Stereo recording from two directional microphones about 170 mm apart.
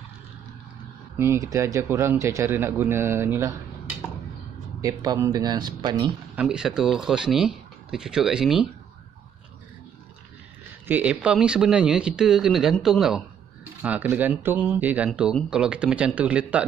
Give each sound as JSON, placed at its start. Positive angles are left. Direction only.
{"t": 1.1, "sound": "a man's voice", "side_deg": -15}
{"t": 4.8, "sound": "speech", "side_deg": -20}
{"t": 6.3, "sound": "speech", "side_deg": -5}
{"t": 10.9, "sound": "a man's voice", "side_deg": -10}